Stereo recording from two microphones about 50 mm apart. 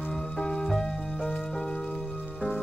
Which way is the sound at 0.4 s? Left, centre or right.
Centre.